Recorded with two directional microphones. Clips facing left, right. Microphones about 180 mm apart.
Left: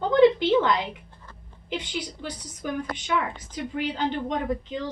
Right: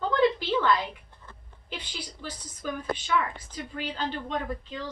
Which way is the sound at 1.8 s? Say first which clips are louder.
Left 6 dB; 20° left (ahead or behind).